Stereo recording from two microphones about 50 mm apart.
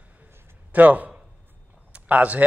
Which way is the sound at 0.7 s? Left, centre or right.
Right.